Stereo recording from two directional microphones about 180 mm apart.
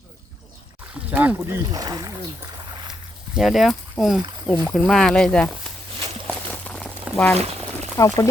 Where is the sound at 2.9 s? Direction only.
5° right (ahead or behind).